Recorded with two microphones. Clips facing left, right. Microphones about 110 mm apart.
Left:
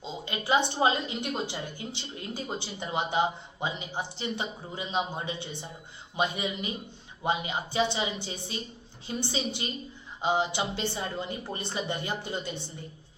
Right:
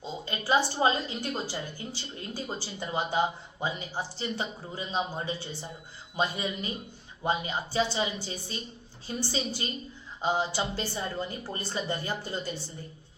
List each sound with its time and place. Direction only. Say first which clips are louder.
0.0 s a woman's voice: even; 20° left (ahead or behind)